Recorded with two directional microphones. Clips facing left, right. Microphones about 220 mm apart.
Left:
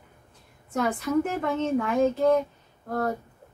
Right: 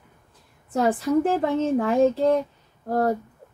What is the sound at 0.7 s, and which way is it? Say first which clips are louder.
Speech: right 4 dB; 30° right (ahead or behind).